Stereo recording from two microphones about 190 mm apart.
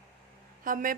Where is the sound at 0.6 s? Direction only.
45° right (ahead or behind).